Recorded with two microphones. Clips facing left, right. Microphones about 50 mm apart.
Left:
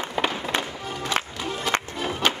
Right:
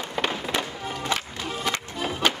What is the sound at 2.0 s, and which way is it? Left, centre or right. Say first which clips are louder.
Music: even; centre.